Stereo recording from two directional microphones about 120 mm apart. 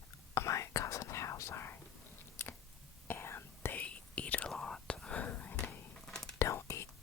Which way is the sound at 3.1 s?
20° left (ahead or behind).